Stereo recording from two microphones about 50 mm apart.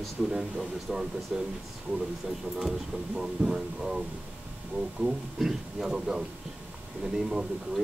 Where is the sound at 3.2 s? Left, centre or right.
Centre.